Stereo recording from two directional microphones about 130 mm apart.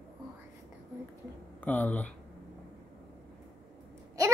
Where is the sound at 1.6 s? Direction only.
10° left (ahead or behind).